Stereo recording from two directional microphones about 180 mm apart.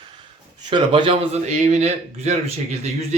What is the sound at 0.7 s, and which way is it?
A man's voice, 30° right (ahead or behind).